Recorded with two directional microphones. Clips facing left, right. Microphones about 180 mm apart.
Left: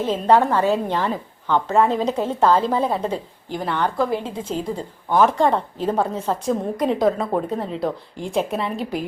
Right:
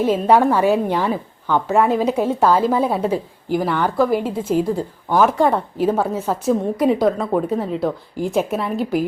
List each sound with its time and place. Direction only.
0.0 s a woman's voice: 10° right (ahead or behind)